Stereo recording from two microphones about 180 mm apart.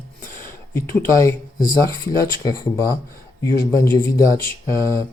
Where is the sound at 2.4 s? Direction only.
20° left (ahead or behind).